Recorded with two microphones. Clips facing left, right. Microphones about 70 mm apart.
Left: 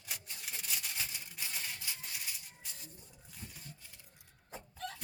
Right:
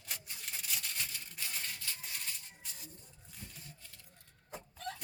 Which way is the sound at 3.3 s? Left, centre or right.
Centre.